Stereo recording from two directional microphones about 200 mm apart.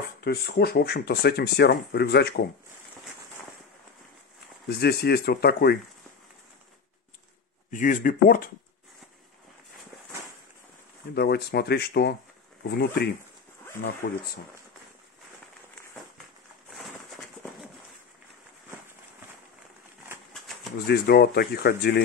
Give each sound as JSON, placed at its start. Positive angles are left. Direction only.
{"t": 0.2, "sound": "speech", "side_deg": 50}
{"t": 4.6, "sound": "speech", "side_deg": 50}
{"t": 7.7, "sound": "speech", "side_deg": 40}
{"t": 11.1, "sound": "speech", "side_deg": 55}
{"t": 20.3, "sound": "a sound", "side_deg": 0}
{"t": 20.8, "sound": "speech", "side_deg": 50}